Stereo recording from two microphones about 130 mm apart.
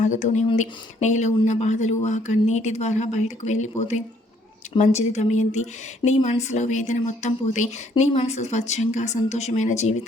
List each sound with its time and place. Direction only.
0.0 s speech: 65° left (ahead or behind)